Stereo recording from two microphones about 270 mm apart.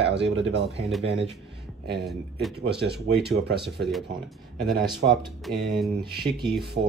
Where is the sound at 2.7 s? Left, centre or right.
Right.